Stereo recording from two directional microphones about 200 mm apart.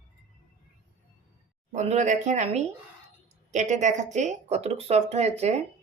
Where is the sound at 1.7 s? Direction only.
35° right (ahead or behind).